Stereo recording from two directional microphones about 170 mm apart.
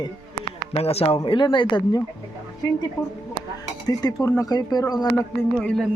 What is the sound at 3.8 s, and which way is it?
Cutlery, 20° left (ahead or behind).